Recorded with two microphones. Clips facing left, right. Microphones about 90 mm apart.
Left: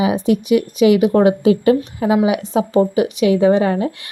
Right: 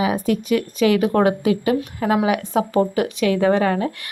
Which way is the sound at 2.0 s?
15° left (ahead or behind).